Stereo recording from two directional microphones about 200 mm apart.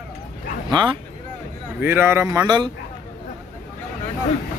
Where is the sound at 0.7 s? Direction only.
25° right (ahead or behind).